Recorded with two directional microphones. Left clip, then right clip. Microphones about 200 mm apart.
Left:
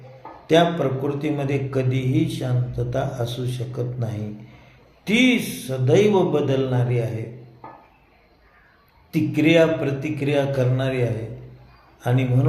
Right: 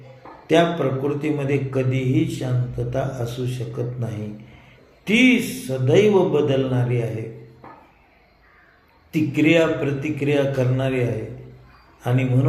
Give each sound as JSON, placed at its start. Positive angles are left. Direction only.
{"t": 0.4, "sound": "speech", "side_deg": 15}
{"t": 9.1, "sound": "speech", "side_deg": 15}